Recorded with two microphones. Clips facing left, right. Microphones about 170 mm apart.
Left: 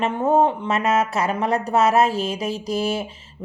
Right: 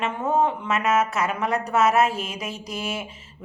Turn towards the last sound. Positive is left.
turn(degrees=35)  # may be behind; listen again after turning